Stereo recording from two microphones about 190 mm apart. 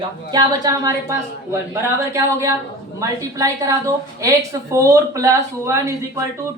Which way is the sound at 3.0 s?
15° right (ahead or behind).